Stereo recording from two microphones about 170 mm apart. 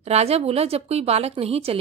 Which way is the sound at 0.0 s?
40° right (ahead or behind).